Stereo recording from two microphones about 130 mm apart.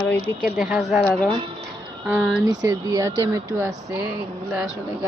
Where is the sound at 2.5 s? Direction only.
30° right (ahead or behind).